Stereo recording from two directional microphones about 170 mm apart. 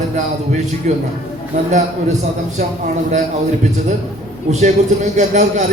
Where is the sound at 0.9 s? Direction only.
40° right (ahead or behind).